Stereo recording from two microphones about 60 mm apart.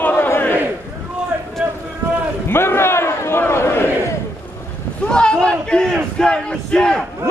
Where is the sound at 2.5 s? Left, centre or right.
Left.